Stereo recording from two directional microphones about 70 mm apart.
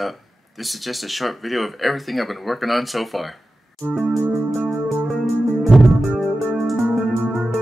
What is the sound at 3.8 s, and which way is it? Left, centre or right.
Music, centre.